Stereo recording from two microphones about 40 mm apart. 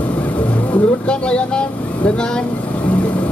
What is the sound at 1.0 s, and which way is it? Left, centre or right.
Speech, left.